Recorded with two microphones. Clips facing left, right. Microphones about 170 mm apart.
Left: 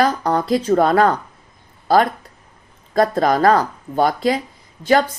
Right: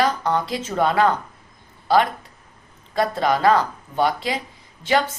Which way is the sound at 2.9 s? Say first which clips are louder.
Left 5 dB; 40° left (ahead or behind).